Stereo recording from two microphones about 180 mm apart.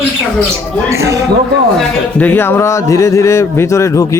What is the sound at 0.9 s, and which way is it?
Speech, 15° right (ahead or behind).